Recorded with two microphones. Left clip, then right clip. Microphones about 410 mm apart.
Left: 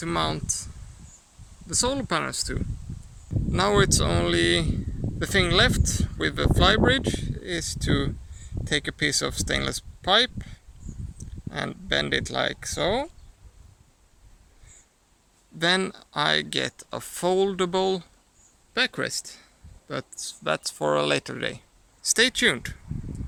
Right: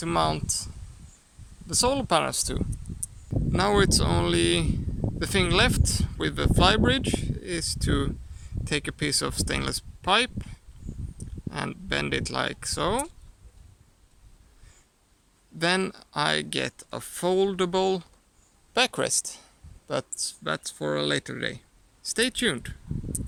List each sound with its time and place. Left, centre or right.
0.0 s speech: centre
15.5 s speech: centre